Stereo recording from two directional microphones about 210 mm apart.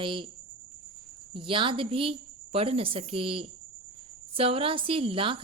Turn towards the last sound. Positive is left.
turn(degrees=-25)  # may be behind; listen again after turning